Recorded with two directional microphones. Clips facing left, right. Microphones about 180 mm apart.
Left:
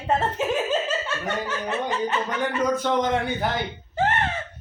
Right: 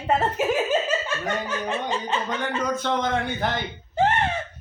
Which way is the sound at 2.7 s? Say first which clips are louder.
Left 2 dB; 10° left (ahead or behind).